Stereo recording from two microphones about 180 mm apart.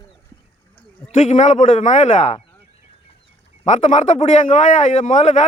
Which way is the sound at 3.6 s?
40° left (ahead or behind).